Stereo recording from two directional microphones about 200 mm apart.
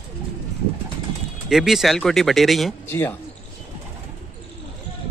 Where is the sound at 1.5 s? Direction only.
Centre (ahead or behind).